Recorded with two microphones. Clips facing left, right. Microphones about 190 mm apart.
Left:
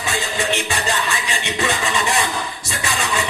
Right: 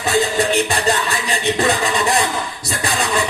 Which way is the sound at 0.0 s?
35° right (ahead or behind).